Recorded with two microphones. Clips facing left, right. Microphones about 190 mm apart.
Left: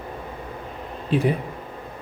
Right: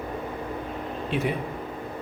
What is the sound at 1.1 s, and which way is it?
Speech, 35° left (ahead or behind).